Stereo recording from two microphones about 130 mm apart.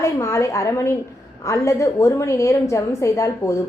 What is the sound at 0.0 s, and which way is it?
A woman's voice, 20° left (ahead or behind).